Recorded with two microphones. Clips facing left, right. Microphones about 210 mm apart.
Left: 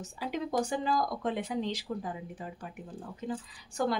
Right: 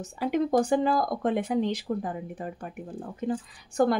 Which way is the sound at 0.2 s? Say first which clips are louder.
Right 8 dB; 55° right (ahead or behind).